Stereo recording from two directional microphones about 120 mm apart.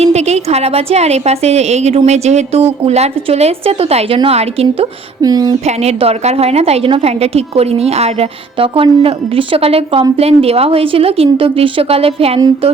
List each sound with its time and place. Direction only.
0.0 s a woman's voice: 65° right (ahead or behind)
5.2 s speech: 30° right (ahead or behind)
5.6 s a woman's voice: 60° right (ahead or behind)